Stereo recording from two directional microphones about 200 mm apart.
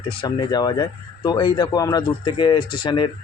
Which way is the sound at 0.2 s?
20° left (ahead or behind).